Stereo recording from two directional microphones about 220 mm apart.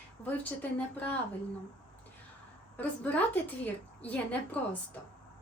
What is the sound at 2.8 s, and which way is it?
A woman's voice, 5° left (ahead or behind).